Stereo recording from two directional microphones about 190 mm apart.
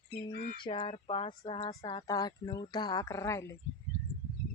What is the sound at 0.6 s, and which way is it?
Speech, 30° left (ahead or behind).